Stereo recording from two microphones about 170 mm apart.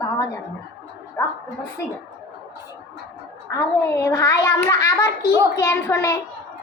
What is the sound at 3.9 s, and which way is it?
A child's voice, 20° left (ahead or behind).